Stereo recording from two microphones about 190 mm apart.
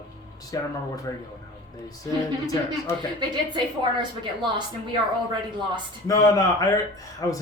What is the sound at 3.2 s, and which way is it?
A woman's voice, 25° right (ahead or behind).